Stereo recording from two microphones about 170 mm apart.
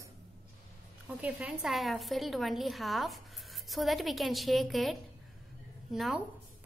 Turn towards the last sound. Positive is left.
turn(degrees=0)  # may be behind; listen again after turning